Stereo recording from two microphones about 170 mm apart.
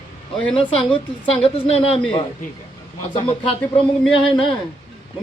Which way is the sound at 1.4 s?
35° left (ahead or behind).